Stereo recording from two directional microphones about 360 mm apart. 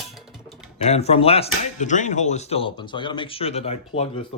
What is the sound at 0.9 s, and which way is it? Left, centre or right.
Speech, centre.